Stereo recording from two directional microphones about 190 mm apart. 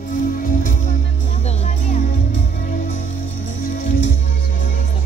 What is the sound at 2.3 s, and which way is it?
Music, 70° left (ahead or behind).